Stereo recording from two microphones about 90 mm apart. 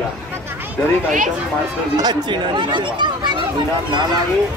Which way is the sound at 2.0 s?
50° right (ahead or behind).